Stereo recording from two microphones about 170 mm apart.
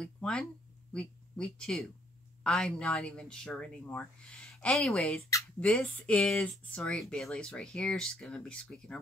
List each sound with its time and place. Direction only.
0.0 s speech: 5° left (ahead or behind)